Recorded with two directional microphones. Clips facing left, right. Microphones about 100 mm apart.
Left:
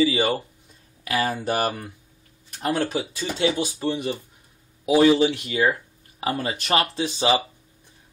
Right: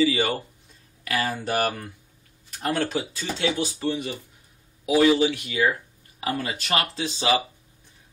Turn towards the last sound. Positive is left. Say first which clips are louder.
# left 2 dB
turn(degrees=20)  # may be behind; listen again after turning